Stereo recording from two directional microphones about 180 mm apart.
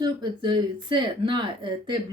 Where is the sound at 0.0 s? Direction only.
25° right (ahead or behind).